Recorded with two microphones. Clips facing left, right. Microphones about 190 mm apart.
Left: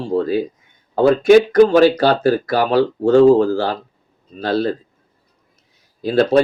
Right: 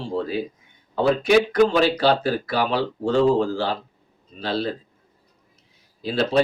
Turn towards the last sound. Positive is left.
turn(degrees=45)  # may be behind; listen again after turning